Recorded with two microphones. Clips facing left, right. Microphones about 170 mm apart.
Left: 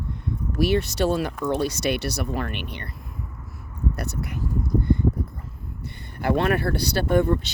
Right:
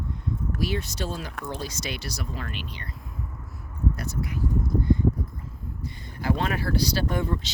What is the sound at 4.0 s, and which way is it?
Speech, 65° left (ahead or behind).